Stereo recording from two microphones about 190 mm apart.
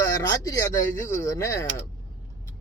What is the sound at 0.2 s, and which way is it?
Speech, 15° left (ahead or behind).